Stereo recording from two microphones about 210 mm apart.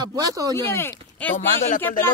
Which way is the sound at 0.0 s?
15° right (ahead or behind).